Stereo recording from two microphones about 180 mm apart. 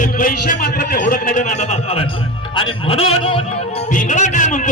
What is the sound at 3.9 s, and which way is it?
Music, 45° left (ahead or behind).